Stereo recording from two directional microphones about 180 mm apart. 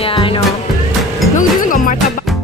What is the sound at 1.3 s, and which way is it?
Music, 45° left (ahead or behind).